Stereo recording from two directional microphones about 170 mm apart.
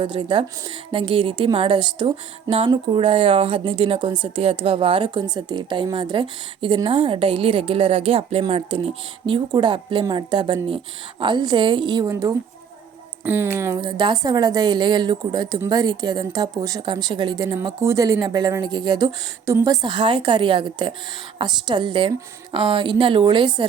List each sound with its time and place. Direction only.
0.0 s a woman's voice: 30° right (ahead or behind); by 13.7 s 15° right (ahead or behind)
13.7 s a woman's voice: 25° right (ahead or behind)